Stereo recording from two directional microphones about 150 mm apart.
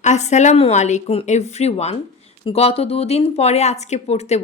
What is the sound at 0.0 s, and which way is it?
A woman's voice, 50° left (ahead or behind).